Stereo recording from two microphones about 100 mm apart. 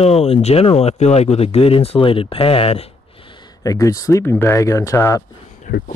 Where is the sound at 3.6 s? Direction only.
35° left (ahead or behind).